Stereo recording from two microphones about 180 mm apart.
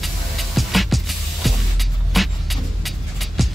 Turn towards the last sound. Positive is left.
turn(degrees=0)  # may be behind; listen again after turning